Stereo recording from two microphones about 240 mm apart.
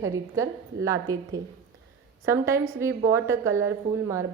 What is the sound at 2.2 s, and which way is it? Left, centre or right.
A woman's voice, centre.